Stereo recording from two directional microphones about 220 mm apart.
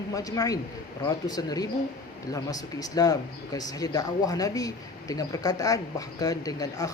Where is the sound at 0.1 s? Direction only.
15° left (ahead or behind).